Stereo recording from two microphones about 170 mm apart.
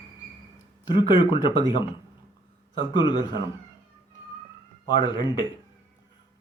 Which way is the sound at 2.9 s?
25° left (ahead or behind).